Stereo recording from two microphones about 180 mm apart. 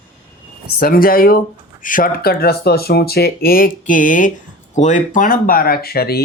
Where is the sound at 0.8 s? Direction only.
55° left (ahead or behind).